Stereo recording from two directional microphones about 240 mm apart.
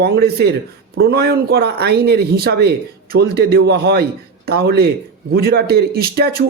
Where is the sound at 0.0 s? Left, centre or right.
Right.